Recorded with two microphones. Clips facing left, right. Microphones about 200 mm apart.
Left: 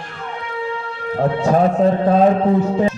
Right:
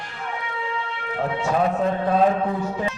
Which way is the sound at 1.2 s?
40° left (ahead or behind).